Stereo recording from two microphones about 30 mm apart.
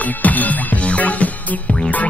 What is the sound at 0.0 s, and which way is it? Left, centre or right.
Music, left.